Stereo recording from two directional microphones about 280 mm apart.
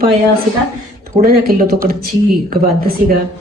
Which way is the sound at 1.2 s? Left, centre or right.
Right.